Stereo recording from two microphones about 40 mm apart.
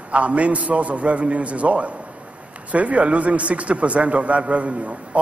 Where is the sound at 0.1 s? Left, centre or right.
Right.